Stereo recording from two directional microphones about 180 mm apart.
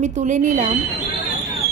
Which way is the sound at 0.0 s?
40° right (ahead or behind).